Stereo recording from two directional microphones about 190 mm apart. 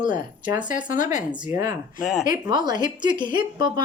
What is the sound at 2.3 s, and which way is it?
A woman's voice, 20° right (ahead or behind).